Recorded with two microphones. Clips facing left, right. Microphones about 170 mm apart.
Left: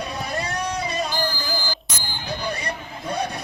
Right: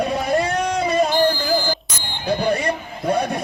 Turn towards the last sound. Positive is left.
turn(degrees=-50)  # may be behind; listen again after turning